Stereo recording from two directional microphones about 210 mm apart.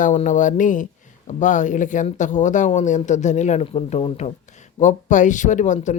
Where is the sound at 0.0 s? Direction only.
35° left (ahead or behind).